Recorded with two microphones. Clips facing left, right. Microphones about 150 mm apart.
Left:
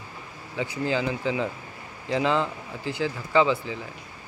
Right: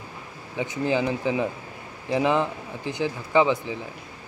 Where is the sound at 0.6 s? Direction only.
20° right (ahead or behind).